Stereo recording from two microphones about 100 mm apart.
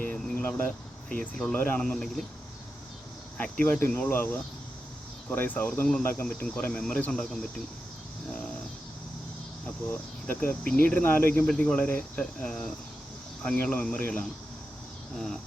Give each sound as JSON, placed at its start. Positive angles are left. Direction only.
{"t": 0.0, "sound": "a sound", "side_deg": 15}
{"t": 1.1, "sound": "cricket", "side_deg": 10}
{"t": 1.8, "sound": "speech", "side_deg": 5}
{"t": 3.3, "sound": "cricket", "side_deg": 15}
{"t": 6.0, "sound": "speech", "side_deg": 20}
{"t": 6.2, "sound": "cricket", "side_deg": 10}
{"t": 9.6, "sound": "cricket", "side_deg": 15}
{"t": 11.4, "sound": "cricket", "side_deg": 10}
{"t": 15.1, "sound": "speech", "side_deg": 5}